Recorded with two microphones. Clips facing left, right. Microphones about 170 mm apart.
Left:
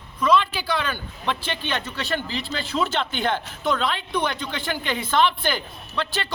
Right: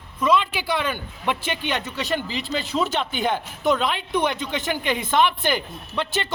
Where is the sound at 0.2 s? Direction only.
15° right (ahead or behind).